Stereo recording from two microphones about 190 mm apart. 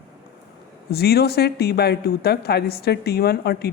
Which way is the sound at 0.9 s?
55° left (ahead or behind).